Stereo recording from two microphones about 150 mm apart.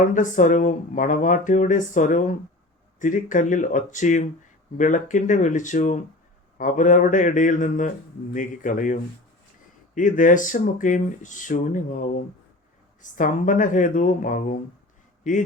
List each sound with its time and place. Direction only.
0.0 s a man's voice: 55° left (ahead or behind)